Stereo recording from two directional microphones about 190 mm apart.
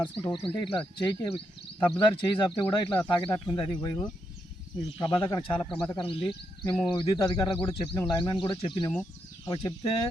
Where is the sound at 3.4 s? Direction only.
20° left (ahead or behind).